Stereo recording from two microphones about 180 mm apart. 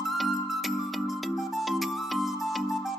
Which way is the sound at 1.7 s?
Centre (ahead or behind).